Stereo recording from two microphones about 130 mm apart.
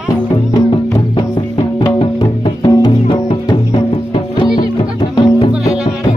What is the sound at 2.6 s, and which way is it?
Music, 35° left (ahead or behind).